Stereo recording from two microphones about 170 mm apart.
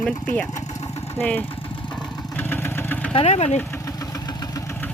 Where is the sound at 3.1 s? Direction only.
40° left (ahead or behind).